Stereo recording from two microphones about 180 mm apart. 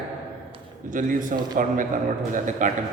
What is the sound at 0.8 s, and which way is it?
A man's voice, 45° right (ahead or behind).